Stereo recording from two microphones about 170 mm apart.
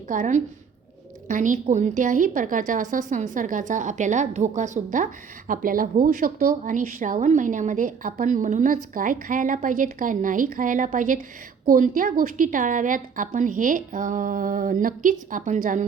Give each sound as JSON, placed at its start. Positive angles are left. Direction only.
{"t": 0.1, "sound": "a woman's voice", "side_deg": -45}